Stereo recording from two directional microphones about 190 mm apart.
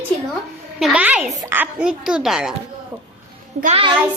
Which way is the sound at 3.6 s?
30° right (ahead or behind).